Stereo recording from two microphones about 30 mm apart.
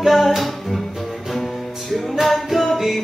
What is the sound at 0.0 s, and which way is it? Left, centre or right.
Music, centre.